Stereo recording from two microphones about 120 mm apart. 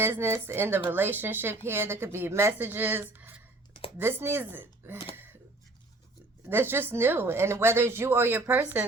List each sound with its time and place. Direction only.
0.0 s speech: 20° right (ahead or behind)
6.5 s speech: 15° right (ahead or behind)